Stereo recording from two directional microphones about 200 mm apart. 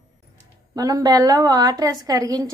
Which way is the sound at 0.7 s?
20° right (ahead or behind).